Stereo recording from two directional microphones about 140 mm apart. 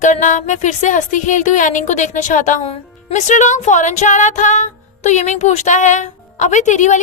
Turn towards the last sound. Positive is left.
turn(degrees=60)  # may be behind; listen again after turning